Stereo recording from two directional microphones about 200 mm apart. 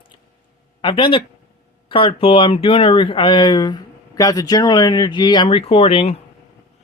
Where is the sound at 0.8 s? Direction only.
25° left (ahead or behind).